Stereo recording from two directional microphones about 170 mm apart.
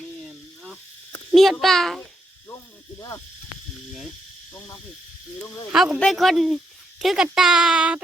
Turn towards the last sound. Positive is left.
turn(degrees=-5)  # may be behind; listen again after turning